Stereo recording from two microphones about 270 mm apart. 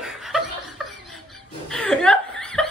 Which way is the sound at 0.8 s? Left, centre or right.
Centre.